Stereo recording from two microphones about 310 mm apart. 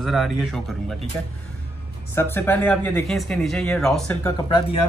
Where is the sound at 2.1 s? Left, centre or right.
Centre.